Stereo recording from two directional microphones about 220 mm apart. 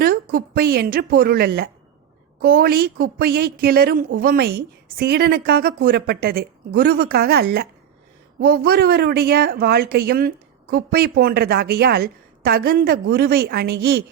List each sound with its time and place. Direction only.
0.0 s a woman's voice: 40° right (ahead or behind)